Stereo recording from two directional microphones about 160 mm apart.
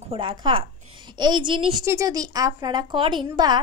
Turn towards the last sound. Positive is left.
turn(degrees=-25)  # may be behind; listen again after turning